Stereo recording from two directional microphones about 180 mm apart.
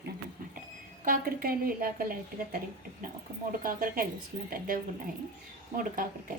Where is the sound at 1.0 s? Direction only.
55° right (ahead or behind).